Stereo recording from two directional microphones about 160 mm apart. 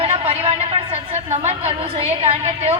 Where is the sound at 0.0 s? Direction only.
40° right (ahead or behind).